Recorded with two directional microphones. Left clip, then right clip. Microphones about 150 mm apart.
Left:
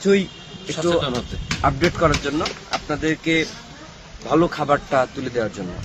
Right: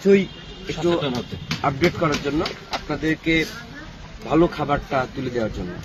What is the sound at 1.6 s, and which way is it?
Speech, 30° left (ahead or behind).